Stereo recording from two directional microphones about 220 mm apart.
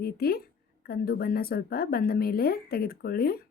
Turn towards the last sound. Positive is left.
turn(degrees=45)  # may be behind; listen again after turning